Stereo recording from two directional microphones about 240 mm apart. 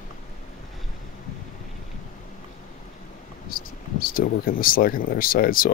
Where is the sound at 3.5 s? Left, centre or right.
Left.